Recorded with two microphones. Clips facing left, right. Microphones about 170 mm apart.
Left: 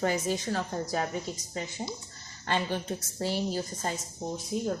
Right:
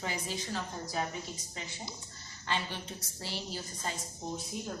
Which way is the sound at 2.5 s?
50° left (ahead or behind).